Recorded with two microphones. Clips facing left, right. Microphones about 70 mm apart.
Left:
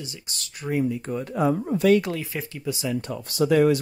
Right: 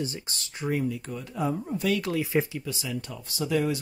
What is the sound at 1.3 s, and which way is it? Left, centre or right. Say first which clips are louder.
Speech: left 6 dB; left.